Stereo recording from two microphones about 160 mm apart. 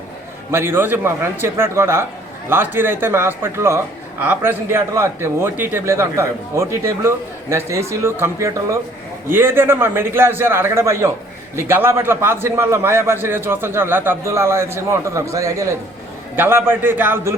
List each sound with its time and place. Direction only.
0.5 s a man's voice: 15° right (ahead or behind)